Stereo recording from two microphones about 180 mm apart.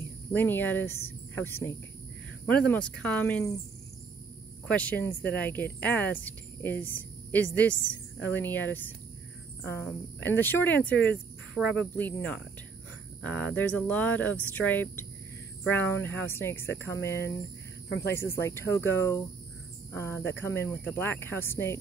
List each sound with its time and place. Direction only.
0.3 s speech: 10° left (ahead or behind)
4.6 s speech: 10° left (ahead or behind)